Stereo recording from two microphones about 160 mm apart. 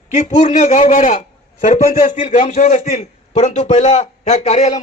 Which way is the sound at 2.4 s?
40° left (ahead or behind).